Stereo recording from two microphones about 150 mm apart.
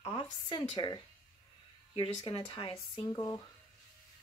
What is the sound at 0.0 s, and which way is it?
Speech, 35° left (ahead or behind).